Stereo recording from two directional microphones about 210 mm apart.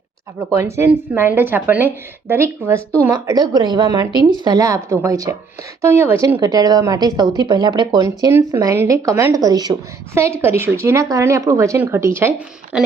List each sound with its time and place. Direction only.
0.5 s a woman's voice: 10° right (ahead or behind)